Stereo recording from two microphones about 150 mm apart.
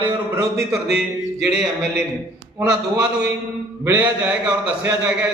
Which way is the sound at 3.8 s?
10° right (ahead or behind).